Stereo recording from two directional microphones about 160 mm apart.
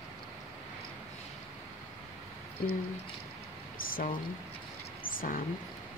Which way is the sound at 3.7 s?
60° left (ahead or behind).